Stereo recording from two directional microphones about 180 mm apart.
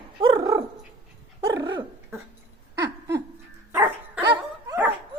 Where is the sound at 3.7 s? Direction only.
10° right (ahead or behind).